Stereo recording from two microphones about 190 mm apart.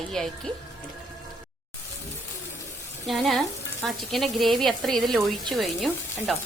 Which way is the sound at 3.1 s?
Centre (ahead or behind).